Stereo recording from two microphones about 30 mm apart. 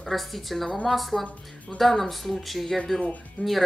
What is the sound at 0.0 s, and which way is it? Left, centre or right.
A woman's voice, centre.